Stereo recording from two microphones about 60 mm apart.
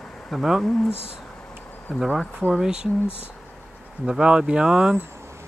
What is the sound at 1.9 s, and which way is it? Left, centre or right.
Speech, centre.